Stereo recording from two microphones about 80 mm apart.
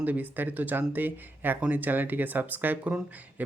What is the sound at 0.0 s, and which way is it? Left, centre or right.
Speech, right.